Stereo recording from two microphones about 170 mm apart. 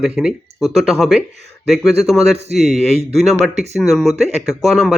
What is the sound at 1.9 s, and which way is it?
Speech, 40° right (ahead or behind).